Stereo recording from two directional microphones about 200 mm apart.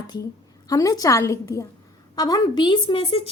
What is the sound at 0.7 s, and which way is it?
A woman's voice, 15° left (ahead or behind).